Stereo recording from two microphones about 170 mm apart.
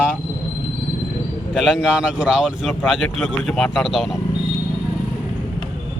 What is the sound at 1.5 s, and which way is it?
Speech, 5° right (ahead or behind).